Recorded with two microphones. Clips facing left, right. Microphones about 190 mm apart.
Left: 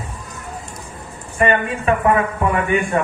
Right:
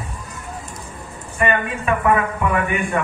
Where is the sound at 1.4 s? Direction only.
25° left (ahead or behind).